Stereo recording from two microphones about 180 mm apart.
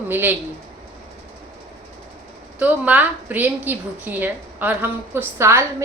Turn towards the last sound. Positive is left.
turn(degrees=-15)  # may be behind; listen again after turning